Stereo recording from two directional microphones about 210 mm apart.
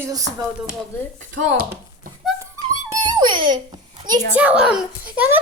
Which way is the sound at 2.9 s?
20° right (ahead or behind).